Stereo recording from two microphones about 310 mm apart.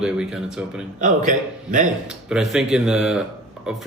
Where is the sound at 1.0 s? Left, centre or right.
Right.